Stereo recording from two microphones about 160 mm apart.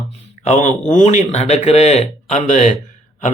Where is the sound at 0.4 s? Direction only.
50° left (ahead or behind).